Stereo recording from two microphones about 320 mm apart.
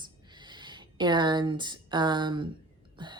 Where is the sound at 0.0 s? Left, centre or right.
Centre.